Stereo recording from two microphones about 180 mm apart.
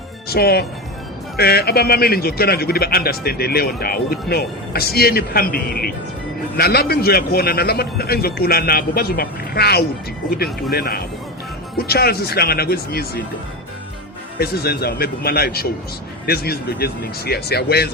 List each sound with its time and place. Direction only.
0.3 s speech: 60° left (ahead or behind)
14.3 s speech: 60° left (ahead or behind)